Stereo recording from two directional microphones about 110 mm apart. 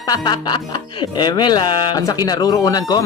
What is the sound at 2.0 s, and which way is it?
Speech, 35° left (ahead or behind).